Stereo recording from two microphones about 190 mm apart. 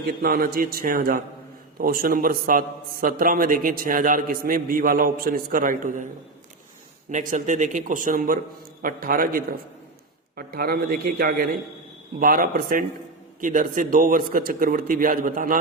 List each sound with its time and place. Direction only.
0.0 s a man's voice: 50° right (ahead or behind)
7.1 s a man's voice: 40° right (ahead or behind)